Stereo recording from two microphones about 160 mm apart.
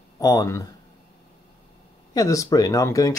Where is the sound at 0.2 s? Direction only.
20° left (ahead or behind).